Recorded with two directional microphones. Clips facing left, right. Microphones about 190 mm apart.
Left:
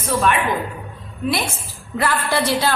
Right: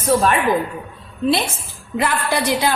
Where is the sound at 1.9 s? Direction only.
20° right (ahead or behind).